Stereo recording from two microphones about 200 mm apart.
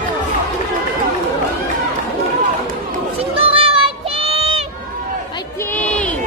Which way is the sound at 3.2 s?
30° right (ahead or behind).